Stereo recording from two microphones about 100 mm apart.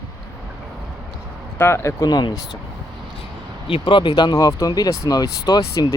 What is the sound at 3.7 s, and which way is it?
Speech, 55° left (ahead or behind).